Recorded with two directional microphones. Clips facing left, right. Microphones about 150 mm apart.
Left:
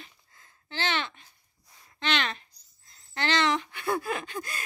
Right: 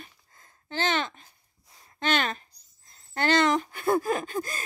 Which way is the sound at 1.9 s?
45° right (ahead or behind).